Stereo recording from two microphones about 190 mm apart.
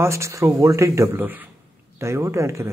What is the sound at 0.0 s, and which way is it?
Speech, 15° right (ahead or behind).